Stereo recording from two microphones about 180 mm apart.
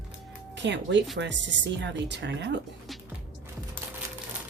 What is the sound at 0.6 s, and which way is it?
Speech, 80° right.